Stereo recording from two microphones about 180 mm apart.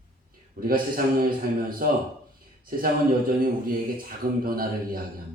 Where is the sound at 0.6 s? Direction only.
55° right (ahead or behind).